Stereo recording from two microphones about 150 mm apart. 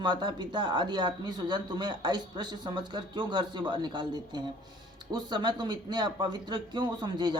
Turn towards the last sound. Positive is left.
turn(degrees=-30)  # may be behind; listen again after turning